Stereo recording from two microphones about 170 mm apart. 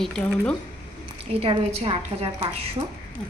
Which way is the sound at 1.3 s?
35° right (ahead or behind).